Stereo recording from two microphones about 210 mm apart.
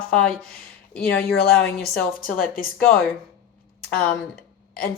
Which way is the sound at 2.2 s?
40° left (ahead or behind).